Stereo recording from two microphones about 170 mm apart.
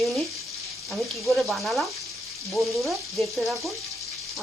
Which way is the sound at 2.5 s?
Centre (ahead or behind).